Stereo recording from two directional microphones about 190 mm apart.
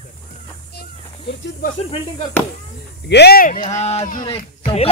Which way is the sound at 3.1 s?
55° left (ahead or behind).